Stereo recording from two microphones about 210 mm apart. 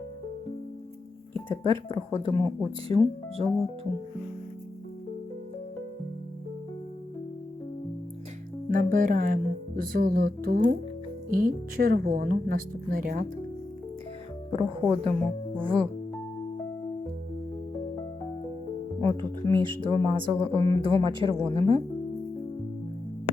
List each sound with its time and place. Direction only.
1.3 s speech: 25° right (ahead or behind)
8.7 s a woman's voice: 40° right (ahead or behind)
14.5 s speech: 25° right (ahead or behind)
18.9 s speech: 25° right (ahead or behind)